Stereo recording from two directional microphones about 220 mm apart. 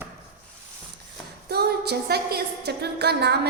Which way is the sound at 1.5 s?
45° right (ahead or behind).